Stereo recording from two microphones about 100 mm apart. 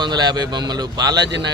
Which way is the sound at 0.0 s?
45° right (ahead or behind).